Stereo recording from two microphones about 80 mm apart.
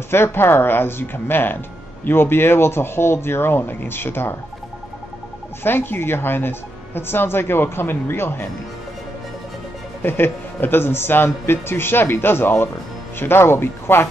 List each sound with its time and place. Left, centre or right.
0.1 s a woman's voice: left
5.6 s a woman's voice: left
10.0 s a woman's voice: left